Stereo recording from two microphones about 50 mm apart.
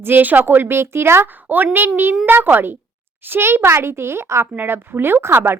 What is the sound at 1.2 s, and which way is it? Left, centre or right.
A woman's voice, right.